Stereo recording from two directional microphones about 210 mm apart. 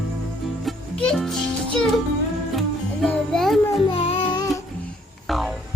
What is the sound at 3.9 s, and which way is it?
Child singing, 25° left (ahead or behind).